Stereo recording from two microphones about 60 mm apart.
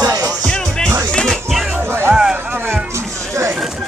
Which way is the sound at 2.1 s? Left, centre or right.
Centre.